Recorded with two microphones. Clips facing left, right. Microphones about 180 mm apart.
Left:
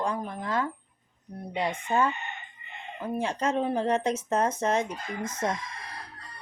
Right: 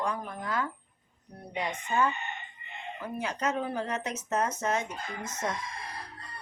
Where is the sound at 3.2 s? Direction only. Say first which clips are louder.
Left 4 dB; 30° left (ahead or behind).